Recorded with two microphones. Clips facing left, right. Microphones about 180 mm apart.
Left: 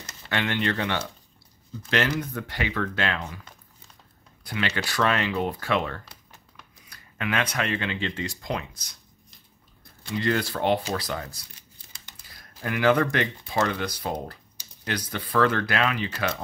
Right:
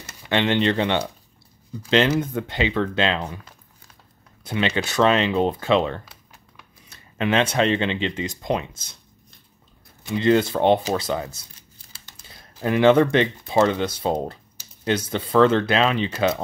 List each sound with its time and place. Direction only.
0.3 s speech: 25° right (ahead or behind)
4.4 s speech: 20° right (ahead or behind)
10.0 s speech: 20° right (ahead or behind)